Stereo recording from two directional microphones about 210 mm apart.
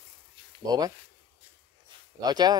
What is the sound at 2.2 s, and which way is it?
Speech, 20° right (ahead or behind).